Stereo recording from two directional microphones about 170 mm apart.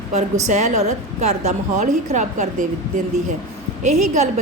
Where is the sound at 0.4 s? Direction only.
45° right (ahead or behind).